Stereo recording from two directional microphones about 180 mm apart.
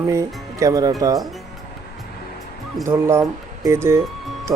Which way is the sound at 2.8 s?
15° right (ahead or behind).